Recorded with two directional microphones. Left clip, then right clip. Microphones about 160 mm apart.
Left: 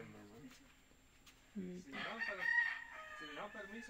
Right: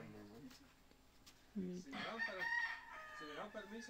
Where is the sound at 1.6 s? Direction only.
10° right (ahead or behind).